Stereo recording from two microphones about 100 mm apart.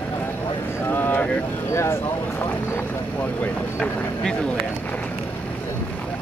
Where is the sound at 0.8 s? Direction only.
20° left (ahead or behind).